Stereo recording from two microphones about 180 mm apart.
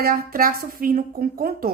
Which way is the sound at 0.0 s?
55° right (ahead or behind).